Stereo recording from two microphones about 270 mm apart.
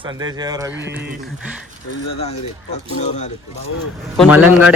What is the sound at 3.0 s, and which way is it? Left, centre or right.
Speech, left.